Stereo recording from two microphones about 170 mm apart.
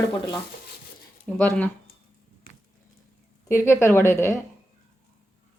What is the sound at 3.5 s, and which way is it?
Speech, 15° left (ahead or behind).